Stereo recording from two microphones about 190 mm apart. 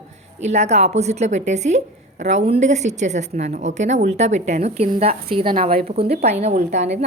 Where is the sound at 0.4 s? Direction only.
35° right (ahead or behind).